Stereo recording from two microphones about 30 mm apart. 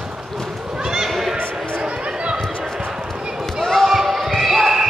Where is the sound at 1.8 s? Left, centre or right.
Right.